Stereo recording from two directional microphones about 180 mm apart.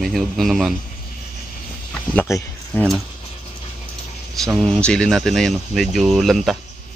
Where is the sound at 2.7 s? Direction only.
Centre (ahead or behind).